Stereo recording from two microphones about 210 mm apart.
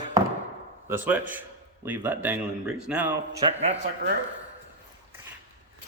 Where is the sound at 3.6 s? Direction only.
30° right (ahead or behind).